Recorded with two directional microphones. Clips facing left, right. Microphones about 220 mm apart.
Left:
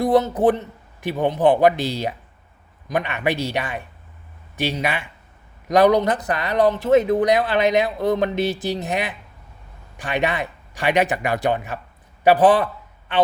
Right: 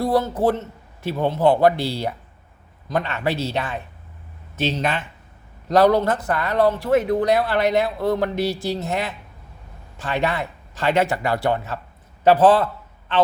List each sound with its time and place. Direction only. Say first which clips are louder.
0.0 s a man's voice: left 3 dB; 20° left (ahead or behind)